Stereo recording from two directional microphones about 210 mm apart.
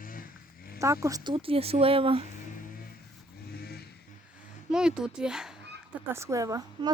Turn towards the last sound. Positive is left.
turn(degrees=-15)  # may be behind; listen again after turning